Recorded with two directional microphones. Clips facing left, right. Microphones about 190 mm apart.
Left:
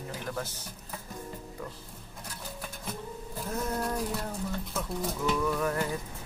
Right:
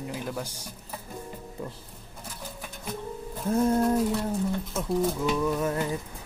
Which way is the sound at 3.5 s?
30° right (ahead or behind).